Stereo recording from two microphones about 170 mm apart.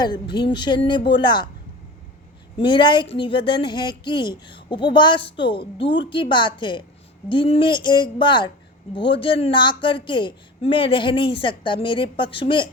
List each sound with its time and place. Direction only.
0.0 s speech: 25° left (ahead or behind)
2.6 s speech: 30° left (ahead or behind)